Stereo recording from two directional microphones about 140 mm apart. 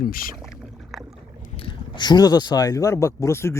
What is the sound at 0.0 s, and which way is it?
Speech, 90° left.